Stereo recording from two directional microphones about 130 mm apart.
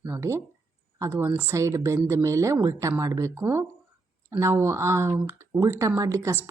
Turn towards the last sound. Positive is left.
turn(degrees=-25)  # may be behind; listen again after turning